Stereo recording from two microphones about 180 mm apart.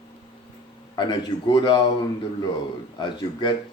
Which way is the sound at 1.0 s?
25° left (ahead or behind).